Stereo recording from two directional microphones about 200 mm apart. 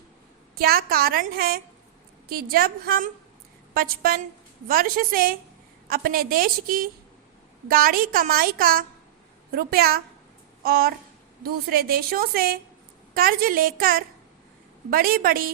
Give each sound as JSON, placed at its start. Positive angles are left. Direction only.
{"t": 0.5, "sound": "a woman's voice", "side_deg": -50}
{"t": 10.6, "sound": "a sound", "side_deg": -50}
{"t": 11.4, "sound": "a woman's voice", "side_deg": -50}